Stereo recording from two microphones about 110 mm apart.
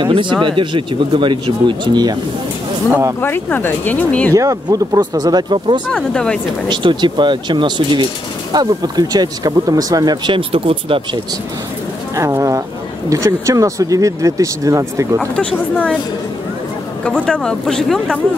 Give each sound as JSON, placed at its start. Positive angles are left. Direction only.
{"t": 0.0, "sound": "speech", "side_deg": -45}
{"t": 2.9, "sound": "speech", "side_deg": -30}
{"t": 3.2, "sound": "speech", "side_deg": 20}
{"t": 4.3, "sound": "speech", "side_deg": -30}
{"t": 5.9, "sound": "speech", "side_deg": 5}
{"t": 6.7, "sound": "speech", "side_deg": -45}
{"t": 10.3, "sound": "speech", "side_deg": -55}
{"t": 12.2, "sound": "speech", "side_deg": -30}
{"t": 15.1, "sound": "speech", "side_deg": 10}
{"t": 17.0, "sound": "speech", "side_deg": 10}